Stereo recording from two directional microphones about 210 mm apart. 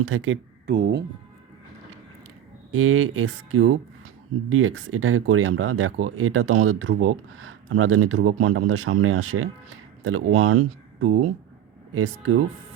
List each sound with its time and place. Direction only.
0.0 s speech: 70° right (ahead or behind); by 1.0 s 50° right (ahead or behind)
2.7 s speech: 75° right (ahead or behind)